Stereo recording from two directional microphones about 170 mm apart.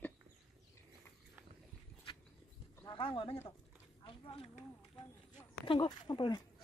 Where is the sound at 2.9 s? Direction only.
30° left (ahead or behind).